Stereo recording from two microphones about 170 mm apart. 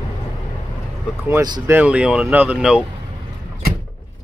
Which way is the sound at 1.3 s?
20° right (ahead or behind).